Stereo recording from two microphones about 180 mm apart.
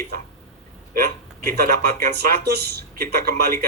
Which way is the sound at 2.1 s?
65° right (ahead or behind).